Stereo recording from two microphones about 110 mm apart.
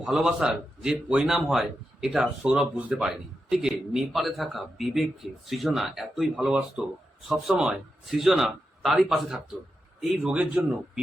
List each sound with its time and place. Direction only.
0.0 s speech: 5° right (ahead or behind)